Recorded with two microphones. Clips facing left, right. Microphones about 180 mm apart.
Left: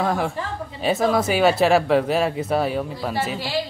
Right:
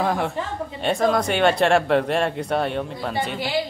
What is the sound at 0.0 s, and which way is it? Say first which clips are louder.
Speech: even; centre (ahead or behind).